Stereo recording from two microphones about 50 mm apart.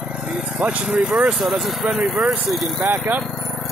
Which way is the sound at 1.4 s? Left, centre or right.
Centre.